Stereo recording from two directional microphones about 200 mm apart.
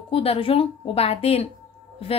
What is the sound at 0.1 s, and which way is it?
A woman's voice, 30° left (ahead or behind).